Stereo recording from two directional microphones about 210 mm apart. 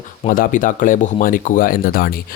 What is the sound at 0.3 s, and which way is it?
Speech, 40° left (ahead or behind).